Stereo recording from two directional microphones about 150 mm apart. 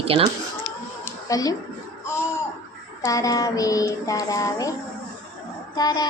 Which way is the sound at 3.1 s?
20° left (ahead or behind).